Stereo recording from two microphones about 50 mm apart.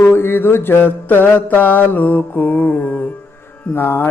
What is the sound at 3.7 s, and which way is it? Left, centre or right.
Speech, left.